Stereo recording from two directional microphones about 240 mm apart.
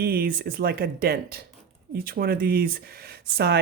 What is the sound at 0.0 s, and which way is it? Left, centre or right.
Speech, right.